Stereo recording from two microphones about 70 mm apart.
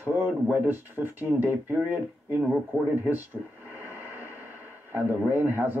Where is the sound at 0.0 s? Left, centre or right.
Right.